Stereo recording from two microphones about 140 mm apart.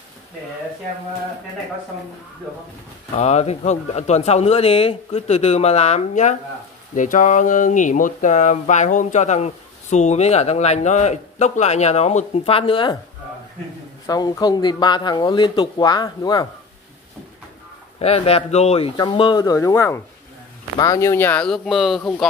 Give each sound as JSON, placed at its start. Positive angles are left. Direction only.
{"t": 3.2, "sound": "speech", "side_deg": 50}
{"t": 7.0, "sound": "speech", "side_deg": 65}
{"t": 14.0, "sound": "speech", "side_deg": 25}
{"t": 17.9, "sound": "speech", "side_deg": 45}
{"t": 19.1, "sound": "speech", "side_deg": 30}
{"t": 22.0, "sound": "speech", "side_deg": 10}